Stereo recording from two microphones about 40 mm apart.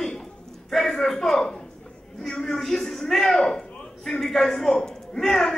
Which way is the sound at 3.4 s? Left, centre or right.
Left.